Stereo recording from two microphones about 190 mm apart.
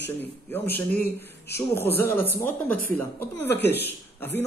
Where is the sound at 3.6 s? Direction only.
60° left (ahead or behind).